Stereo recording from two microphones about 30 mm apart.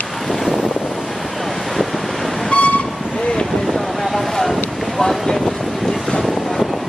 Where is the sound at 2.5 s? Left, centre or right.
Left.